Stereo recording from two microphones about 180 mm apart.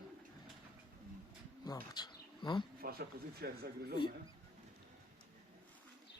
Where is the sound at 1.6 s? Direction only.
20° left (ahead or behind).